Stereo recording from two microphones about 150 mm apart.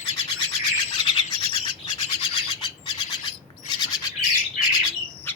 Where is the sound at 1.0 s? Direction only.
35° left (ahead or behind).